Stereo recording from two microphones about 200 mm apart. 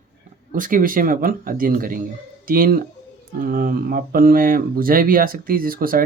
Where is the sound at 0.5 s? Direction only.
40° right (ahead or behind).